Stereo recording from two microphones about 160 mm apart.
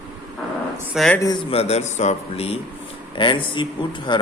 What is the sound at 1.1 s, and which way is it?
Speech, 20° left (ahead or behind).